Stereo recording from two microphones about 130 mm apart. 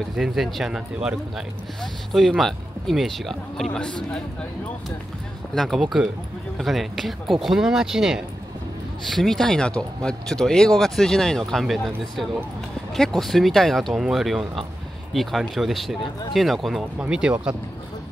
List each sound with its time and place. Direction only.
0.1 s speech: 5° right (ahead or behind)
5.5 s speech: centre (ahead or behind)
16.0 s speech: 40° left (ahead or behind)
16.3 s speech: centre (ahead or behind)